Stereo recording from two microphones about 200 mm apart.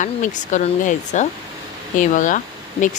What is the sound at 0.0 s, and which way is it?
A woman's voice, 40° left (ahead or behind).